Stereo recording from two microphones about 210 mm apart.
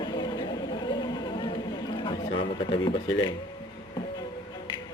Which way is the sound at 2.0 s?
25° left (ahead or behind).